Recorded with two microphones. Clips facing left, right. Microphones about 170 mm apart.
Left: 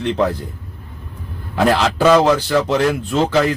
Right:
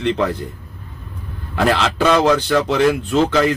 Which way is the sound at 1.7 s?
Centre (ahead or behind).